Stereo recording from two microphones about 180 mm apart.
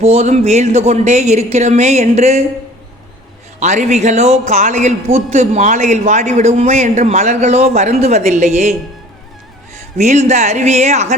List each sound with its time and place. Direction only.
0.0 s speech: 35° right (ahead or behind)
3.6 s speech: 40° right (ahead or behind)
10.0 s speech: 40° right (ahead or behind)